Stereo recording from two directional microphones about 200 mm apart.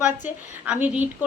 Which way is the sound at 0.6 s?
5° right (ahead or behind).